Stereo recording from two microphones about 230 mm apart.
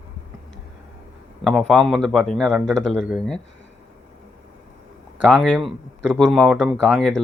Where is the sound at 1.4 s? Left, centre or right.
Centre.